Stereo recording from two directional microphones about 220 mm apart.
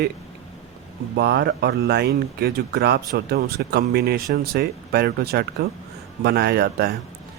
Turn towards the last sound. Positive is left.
turn(degrees=-45)  # may be behind; listen again after turning